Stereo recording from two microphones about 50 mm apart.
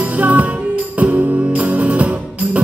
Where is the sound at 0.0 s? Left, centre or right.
Right.